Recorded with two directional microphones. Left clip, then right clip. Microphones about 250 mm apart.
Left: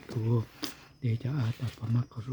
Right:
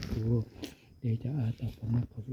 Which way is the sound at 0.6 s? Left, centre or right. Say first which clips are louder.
Left 5 dB; centre.